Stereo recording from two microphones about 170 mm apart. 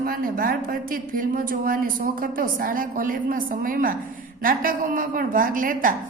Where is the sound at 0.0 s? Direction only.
60° right (ahead or behind).